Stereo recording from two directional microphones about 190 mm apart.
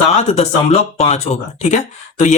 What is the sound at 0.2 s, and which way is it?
Speech, 35° left (ahead or behind).